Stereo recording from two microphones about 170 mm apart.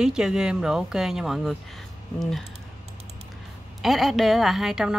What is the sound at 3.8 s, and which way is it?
Speech, centre (ahead or behind).